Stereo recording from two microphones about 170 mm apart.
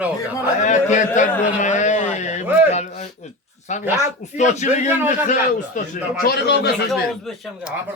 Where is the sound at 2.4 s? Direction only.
10° right (ahead or behind).